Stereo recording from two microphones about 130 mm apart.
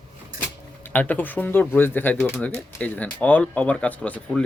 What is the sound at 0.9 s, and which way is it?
Speech, 15° left (ahead or behind).